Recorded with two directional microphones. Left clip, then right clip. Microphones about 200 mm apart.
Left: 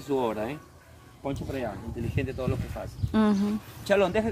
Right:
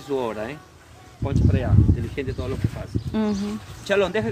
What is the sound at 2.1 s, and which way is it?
Speech, 40° left (ahead or behind).